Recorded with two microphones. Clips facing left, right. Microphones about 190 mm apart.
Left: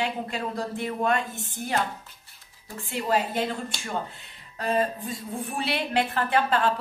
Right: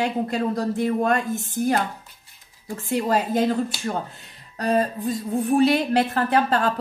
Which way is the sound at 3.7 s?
5° right (ahead or behind).